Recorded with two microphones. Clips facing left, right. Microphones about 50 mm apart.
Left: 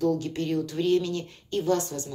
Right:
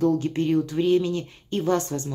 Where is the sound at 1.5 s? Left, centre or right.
Right.